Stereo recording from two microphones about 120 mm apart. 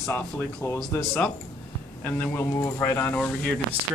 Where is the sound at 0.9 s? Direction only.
20° left (ahead or behind).